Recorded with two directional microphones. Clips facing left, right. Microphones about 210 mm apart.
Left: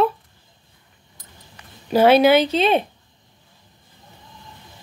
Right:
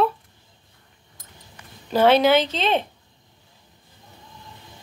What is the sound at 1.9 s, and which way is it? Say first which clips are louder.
Speech: left 3 dB; 10° left (ahead or behind).